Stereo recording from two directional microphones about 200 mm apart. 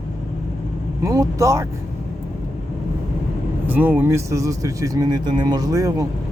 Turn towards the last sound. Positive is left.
turn(degrees=-15)  # may be behind; listen again after turning